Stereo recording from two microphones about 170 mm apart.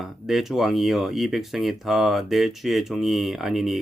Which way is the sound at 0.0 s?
Centre (ahead or behind).